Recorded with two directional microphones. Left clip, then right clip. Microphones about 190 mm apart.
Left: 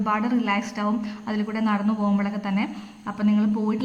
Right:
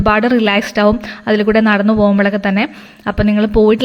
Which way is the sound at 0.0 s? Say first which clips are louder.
Right 12 dB; 35° right (ahead or behind).